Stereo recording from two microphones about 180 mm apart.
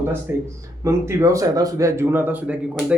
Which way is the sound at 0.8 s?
15° right (ahead or behind).